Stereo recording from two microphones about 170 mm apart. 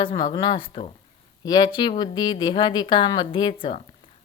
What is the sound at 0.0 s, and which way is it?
Speech, 30° left (ahead or behind).